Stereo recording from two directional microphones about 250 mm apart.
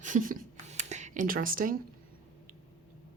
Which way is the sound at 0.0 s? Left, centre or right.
Right.